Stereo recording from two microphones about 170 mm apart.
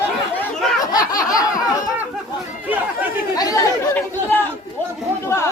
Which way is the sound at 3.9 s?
10° left (ahead or behind).